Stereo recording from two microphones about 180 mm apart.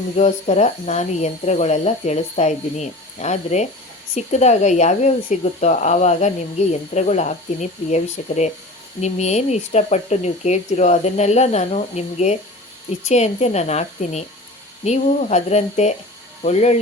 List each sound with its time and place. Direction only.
0.2 s speech: 40° left (ahead or behind)